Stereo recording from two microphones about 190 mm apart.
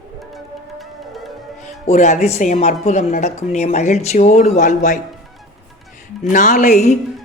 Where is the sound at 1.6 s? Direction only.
40° left (ahead or behind).